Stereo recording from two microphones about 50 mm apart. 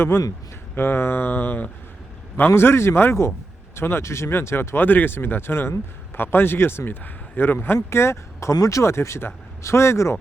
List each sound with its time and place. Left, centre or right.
0.8 s speech: left
2.6 s a man's voice: left